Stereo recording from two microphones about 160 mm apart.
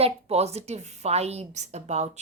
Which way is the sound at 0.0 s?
40° right (ahead or behind).